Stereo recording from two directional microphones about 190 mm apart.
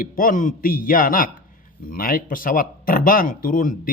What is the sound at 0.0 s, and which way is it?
Speech, 45° left (ahead or behind).